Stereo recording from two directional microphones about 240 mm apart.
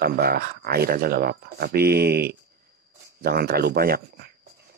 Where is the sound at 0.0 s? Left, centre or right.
Right.